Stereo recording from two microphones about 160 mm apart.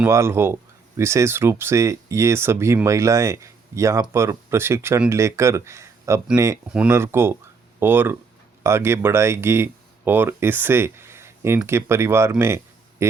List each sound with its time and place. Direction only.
0.0 s speech: 15° right (ahead or behind)